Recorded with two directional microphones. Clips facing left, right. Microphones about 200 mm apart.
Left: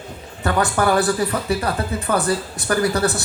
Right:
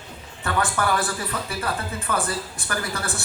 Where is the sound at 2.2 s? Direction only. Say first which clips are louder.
Left 9 dB; 35° left (ahead or behind).